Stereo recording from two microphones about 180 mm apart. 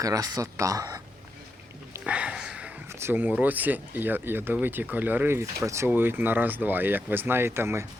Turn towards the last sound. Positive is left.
turn(degrees=-15)  # may be behind; listen again after turning